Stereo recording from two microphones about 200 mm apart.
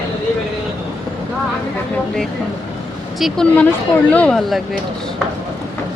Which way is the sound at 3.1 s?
Centre (ahead or behind).